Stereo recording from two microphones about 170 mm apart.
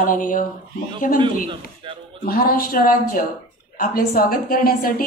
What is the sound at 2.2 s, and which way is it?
A woman's voice, 60° left (ahead or behind).